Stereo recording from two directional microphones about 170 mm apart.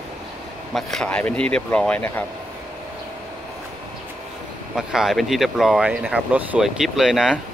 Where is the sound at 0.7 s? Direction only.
5° left (ahead or behind).